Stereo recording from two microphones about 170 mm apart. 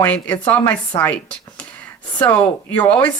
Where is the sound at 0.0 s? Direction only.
10° left (ahead or behind).